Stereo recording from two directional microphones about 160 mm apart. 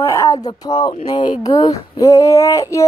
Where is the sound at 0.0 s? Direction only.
20° left (ahead or behind).